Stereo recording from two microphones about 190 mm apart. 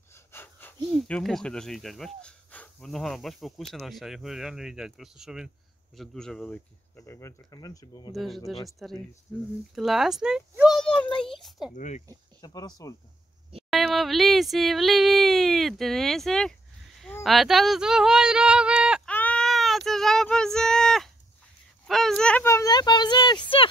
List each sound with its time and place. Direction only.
0.1 s a sound: 10° left (ahead or behind)
0.8 s speech: 5° left (ahead or behind); by 8.1 s 20° left (ahead or behind)
8.1 s speech: centre (ahead or behind)
10.8 s a sound: 5° left (ahead or behind)
11.7 s speech: 40° left (ahead or behind)
12.4 s speech: 20° left (ahead or behind)
13.7 s speech: centre (ahead or behind)
19.0 s child singing: 5° left (ahead or behind)
21.8 s a sound: centre (ahead or behind); by 23.7 s 25° left (ahead or behind)